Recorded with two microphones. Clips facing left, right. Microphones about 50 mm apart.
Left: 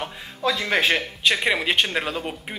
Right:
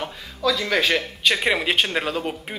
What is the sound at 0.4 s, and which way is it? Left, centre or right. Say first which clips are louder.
Speech: right 1 dB; left.